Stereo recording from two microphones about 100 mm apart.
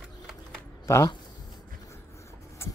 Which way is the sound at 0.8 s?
30° left (ahead or behind).